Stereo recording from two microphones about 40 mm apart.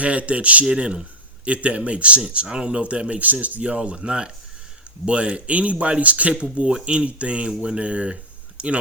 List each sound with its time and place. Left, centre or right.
0.0 s speech: right
0.6 s speech: right
6.3 s speech: right